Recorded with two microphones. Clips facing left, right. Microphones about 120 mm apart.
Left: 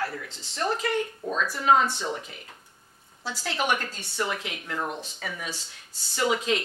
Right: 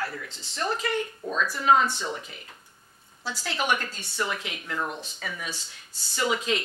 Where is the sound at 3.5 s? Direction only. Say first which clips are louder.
Even; 50° left (ahead or behind).